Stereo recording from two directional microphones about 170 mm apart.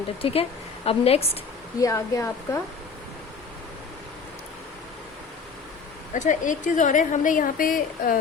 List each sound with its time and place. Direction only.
0.2 s a woman's voice: 35° left (ahead or behind)
1.8 s a woman's voice: 20° left (ahead or behind)
6.1 s a woman's voice: 50° left (ahead or behind)